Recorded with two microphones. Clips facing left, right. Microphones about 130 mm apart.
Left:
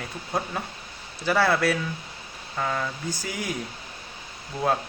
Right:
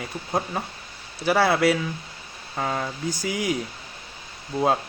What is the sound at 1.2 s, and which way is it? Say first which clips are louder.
Speech: right 3 dB; 15° right (ahead or behind).